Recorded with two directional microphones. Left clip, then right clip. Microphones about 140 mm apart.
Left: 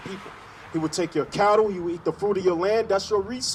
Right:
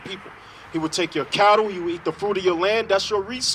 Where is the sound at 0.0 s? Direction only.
20° left (ahead or behind).